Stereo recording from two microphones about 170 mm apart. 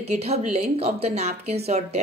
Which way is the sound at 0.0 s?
40° right (ahead or behind).